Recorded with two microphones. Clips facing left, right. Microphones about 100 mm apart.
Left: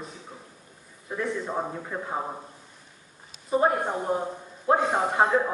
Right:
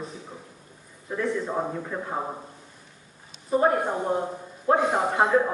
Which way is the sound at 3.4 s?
5° left (ahead or behind).